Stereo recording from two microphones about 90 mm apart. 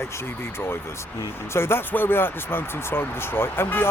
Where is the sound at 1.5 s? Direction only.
25° left (ahead or behind).